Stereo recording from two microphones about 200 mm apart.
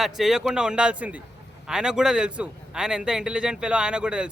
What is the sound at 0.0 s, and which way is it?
A man's voice, centre (ahead or behind).